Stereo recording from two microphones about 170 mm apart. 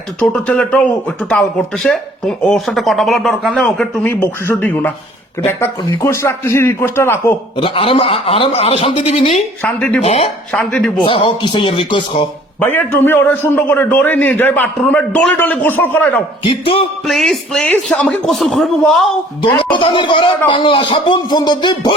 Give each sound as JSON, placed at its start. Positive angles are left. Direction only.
{"t": 0.2, "sound": "a man's voice", "side_deg": 5}
{"t": 7.5, "sound": "a man's voice", "side_deg": 30}
{"t": 9.6, "sound": "a man's voice", "side_deg": 5}
{"t": 10.0, "sound": "a man's voice", "side_deg": 35}
{"t": 10.5, "sound": "speech", "side_deg": 5}
{"t": 11.0, "sound": "speech", "side_deg": 30}
{"t": 12.5, "sound": "a man's voice", "side_deg": 10}
{"t": 16.4, "sound": "a man's voice", "side_deg": 35}
{"t": 17.1, "sound": "speech", "side_deg": 0}
{"t": 19.5, "sound": "speech", "side_deg": 30}